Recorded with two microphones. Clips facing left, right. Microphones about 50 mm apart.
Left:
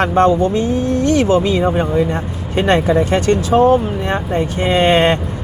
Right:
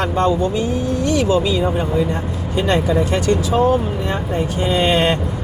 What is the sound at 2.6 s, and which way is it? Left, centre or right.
Speech, left.